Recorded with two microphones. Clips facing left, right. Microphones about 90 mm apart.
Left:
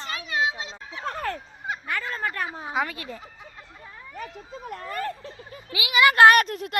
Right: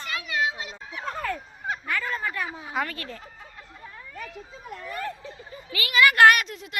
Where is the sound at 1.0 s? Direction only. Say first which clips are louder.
Left 1 dB; 60° left (ahead or behind).